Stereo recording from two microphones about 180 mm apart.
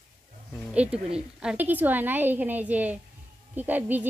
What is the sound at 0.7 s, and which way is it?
A woman's voice, 5° right (ahead or behind).